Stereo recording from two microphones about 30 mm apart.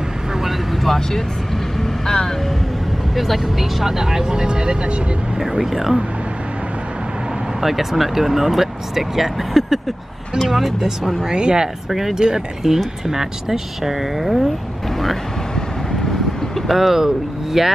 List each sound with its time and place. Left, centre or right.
0.8 s speech: centre
1.8 s vehicle: centre
3.2 s speech: centre
3.8 s speech: centre; by 5.4 s right
5.6 s speech: centre
7.6 s speech: centre
11.1 s speech: right
11.6 s speech: centre
12.2 s speech: right; by 14.5 s centre
15.5 s vehicle: centre
16.1 s vehicle: centre
16.7 s speech: centre